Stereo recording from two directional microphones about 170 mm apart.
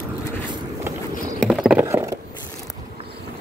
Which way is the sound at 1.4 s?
5° right (ahead or behind).